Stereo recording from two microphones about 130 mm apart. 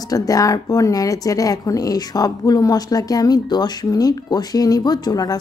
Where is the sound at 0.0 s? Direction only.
30° left (ahead or behind).